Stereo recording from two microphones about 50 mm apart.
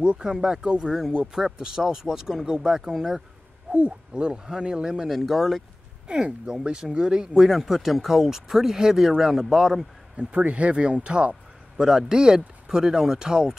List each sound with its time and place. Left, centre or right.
0.0 s speech: centre
3.7 s speech: right
5.1 s speech: centre
6.0 s speech: centre
7.4 s speech: centre
10.1 s speech: right
11.7 s speech: centre